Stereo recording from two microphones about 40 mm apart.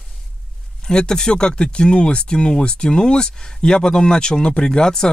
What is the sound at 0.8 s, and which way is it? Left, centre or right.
Speech, centre.